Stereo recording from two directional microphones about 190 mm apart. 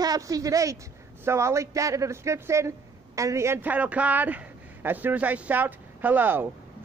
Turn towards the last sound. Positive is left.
turn(degrees=-10)  # may be behind; listen again after turning